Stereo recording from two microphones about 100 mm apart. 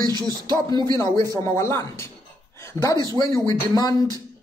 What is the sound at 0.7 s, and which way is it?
Speech, 45° right (ahead or behind).